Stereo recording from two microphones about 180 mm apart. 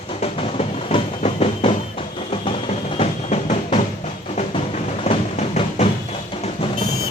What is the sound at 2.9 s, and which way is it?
Music, 40° left (ahead or behind).